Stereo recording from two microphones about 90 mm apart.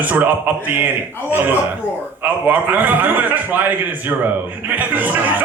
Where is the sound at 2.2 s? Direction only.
15° right (ahead or behind).